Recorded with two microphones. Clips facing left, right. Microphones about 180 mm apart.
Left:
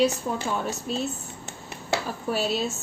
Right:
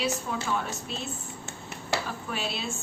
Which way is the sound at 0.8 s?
40° left (ahead or behind).